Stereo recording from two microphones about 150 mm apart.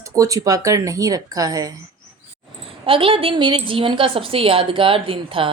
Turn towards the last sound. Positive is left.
turn(degrees=-35)  # may be behind; listen again after turning